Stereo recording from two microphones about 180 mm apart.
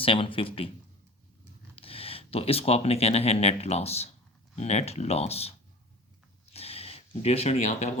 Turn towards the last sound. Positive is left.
turn(degrees=40)  # may be behind; listen again after turning